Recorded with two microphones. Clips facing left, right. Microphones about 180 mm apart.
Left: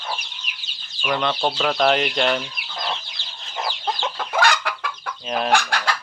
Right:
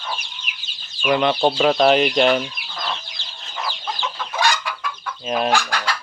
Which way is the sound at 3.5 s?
50° left (ahead or behind).